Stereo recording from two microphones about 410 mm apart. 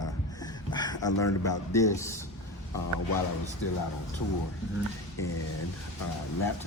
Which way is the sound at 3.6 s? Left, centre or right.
Left.